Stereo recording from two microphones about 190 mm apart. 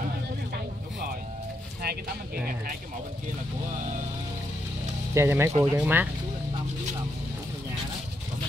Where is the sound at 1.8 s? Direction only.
55° right (ahead or behind).